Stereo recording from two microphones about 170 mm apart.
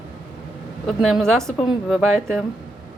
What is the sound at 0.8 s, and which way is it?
A woman's voice, centre (ahead or behind).